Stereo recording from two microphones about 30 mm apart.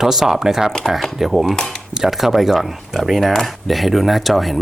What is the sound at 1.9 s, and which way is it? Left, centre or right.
Speech, centre.